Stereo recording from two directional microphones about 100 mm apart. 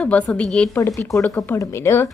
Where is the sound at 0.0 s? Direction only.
10° left (ahead or behind).